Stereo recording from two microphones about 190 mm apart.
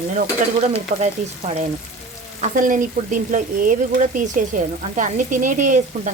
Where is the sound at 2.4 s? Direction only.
45° right (ahead or behind).